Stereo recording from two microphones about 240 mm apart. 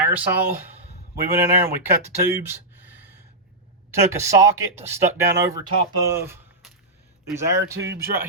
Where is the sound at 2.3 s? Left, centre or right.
Centre.